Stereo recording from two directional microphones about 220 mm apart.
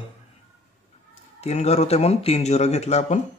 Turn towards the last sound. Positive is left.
turn(degrees=30)  # may be behind; listen again after turning